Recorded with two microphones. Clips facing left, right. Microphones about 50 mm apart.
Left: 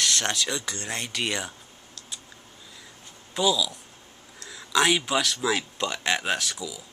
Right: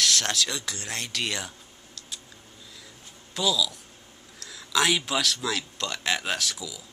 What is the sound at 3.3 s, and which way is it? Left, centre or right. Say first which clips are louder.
Speech: left 2 dB; centre.